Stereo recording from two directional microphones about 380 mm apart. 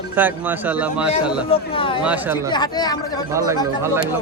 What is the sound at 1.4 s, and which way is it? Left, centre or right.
Speech, centre.